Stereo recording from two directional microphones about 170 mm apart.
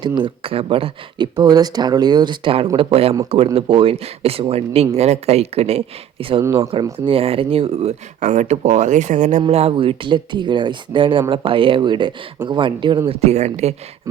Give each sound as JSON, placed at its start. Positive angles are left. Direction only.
{"t": 0.0, "sound": "speech", "side_deg": -30}
{"t": 13.1, "sound": "speech", "side_deg": -40}